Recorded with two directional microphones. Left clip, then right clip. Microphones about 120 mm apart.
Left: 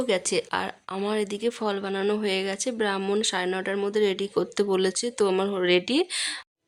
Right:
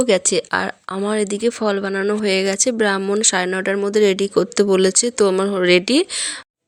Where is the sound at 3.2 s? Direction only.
35° right (ahead or behind).